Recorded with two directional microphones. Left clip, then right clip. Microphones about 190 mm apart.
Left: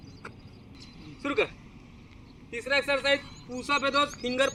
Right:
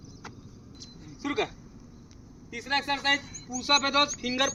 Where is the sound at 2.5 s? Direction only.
50° right (ahead or behind).